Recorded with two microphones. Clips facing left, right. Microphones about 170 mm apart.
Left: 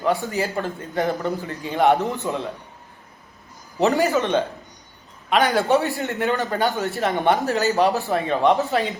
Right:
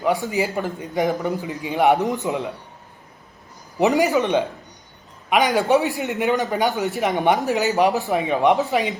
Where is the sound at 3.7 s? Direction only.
15° right (ahead or behind).